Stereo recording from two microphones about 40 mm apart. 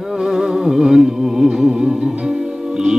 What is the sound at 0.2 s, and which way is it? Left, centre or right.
Music, centre.